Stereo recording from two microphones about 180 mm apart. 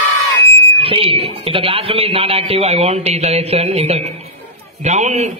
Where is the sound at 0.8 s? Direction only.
30° right (ahead or behind).